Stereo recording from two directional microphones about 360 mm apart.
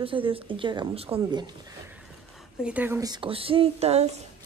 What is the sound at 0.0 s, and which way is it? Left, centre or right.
A woman's voice, centre.